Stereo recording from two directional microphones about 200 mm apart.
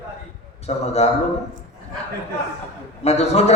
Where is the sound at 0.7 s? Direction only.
30° left (ahead or behind).